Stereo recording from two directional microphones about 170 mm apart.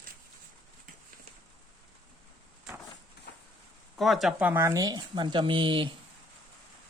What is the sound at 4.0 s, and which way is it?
Speech, centre (ahead or behind).